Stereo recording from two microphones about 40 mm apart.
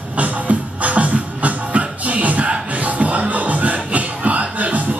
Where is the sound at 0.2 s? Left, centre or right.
Right.